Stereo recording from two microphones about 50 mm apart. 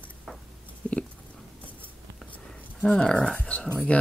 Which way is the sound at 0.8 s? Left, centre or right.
Left.